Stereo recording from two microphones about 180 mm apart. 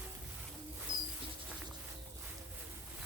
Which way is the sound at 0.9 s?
25° right (ahead or behind).